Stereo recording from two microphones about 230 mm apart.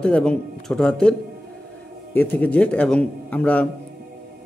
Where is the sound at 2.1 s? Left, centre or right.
Centre.